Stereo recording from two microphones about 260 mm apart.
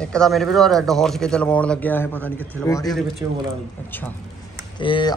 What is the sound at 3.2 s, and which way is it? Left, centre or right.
Speech, centre.